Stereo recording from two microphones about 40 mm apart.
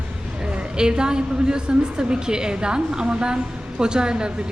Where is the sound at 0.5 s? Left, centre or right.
Right.